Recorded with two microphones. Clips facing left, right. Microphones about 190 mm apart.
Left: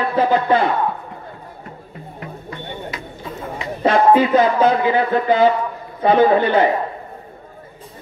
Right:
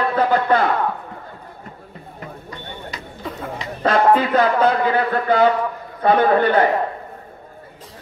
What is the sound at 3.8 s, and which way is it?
Speech, 15° left (ahead or behind).